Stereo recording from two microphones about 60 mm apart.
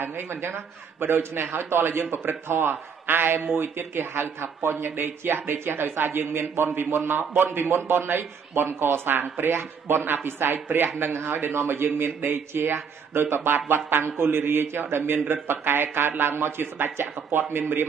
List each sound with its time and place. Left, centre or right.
0.0 s speech: right